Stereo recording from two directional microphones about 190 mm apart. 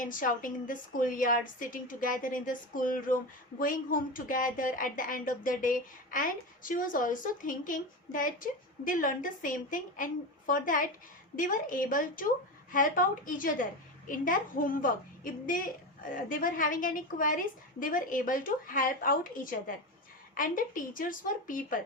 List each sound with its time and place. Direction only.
0.0 s a woman's voice: 45° left (ahead or behind)